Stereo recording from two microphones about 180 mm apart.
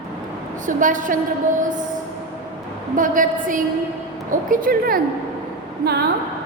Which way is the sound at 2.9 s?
45° right (ahead or behind).